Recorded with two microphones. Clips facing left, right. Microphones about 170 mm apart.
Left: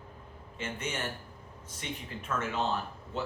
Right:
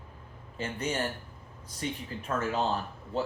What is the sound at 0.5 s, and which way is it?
Speech, 35° right (ahead or behind).